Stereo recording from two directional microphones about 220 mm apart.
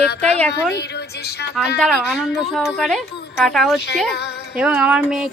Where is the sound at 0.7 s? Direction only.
50° left (ahead or behind).